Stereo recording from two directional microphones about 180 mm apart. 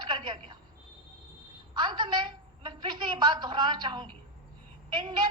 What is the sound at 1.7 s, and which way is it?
A woman's voice, 25° right (ahead or behind).